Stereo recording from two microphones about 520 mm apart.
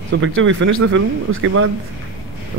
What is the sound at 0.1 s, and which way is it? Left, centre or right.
Speech, right.